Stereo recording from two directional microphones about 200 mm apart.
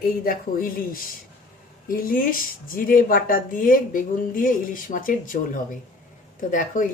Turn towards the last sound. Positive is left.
turn(degrees=40)  # may be behind; listen again after turning